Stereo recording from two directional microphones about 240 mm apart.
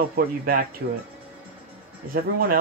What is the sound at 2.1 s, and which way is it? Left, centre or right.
Speech, right.